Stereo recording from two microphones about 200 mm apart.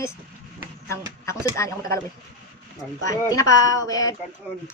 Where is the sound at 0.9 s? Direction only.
15° left (ahead or behind).